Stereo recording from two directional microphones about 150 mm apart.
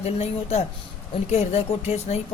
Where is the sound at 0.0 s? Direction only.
45° left (ahead or behind).